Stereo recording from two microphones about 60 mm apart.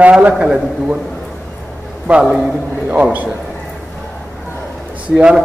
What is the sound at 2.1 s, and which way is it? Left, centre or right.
A man's voice, right.